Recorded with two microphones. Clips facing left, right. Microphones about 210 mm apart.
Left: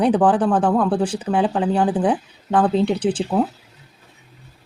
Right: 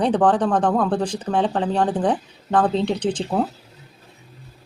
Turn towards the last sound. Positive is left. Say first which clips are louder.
# left 2 dB
turn(degrees=5)  # may be behind; listen again after turning